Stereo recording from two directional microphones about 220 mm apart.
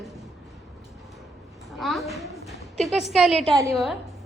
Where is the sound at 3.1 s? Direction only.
Centre (ahead or behind).